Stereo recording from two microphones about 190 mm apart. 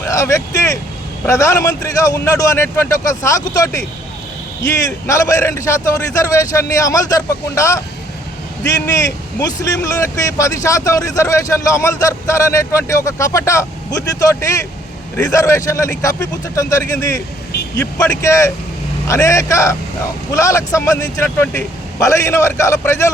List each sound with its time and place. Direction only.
0.0 s speech: 15° left (ahead or behind)
4.8 s speech: 15° left (ahead or behind)